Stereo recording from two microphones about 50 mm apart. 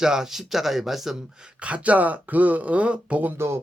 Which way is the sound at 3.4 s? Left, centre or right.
Right.